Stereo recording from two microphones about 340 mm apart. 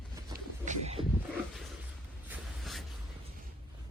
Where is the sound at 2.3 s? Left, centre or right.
Centre.